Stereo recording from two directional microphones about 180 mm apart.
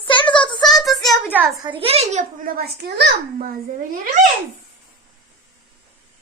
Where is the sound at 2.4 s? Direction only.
55° right (ahead or behind).